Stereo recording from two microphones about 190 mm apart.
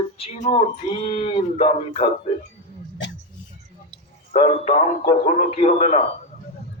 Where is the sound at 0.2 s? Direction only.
35° left (ahead or behind).